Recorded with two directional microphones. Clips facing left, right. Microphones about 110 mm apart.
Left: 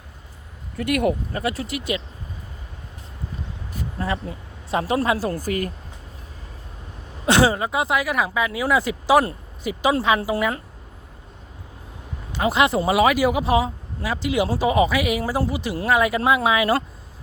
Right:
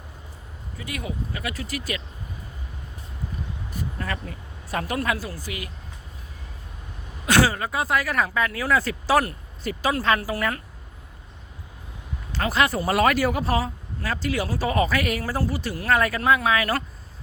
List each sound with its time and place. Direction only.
0.8 s speech: 65° left (ahead or behind)
1.3 s speech: 30° left (ahead or behind)
3.9 s speech: 25° left (ahead or behind)
5.3 s speech: 45° left (ahead or behind)
7.3 s speech: 20° left (ahead or behind)
10.2 s speech: 25° left (ahead or behind)
12.3 s speech: 15° left (ahead or behind)
12.9 s speech: 10° left (ahead or behind)